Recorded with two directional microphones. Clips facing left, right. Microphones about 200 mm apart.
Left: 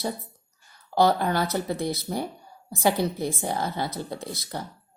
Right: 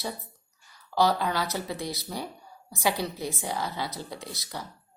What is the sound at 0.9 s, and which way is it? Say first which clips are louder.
Speech: left 3 dB; 50° left (ahead or behind).